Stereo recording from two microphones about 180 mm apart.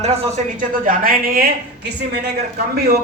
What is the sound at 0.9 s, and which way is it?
Speech, 55° right (ahead or behind).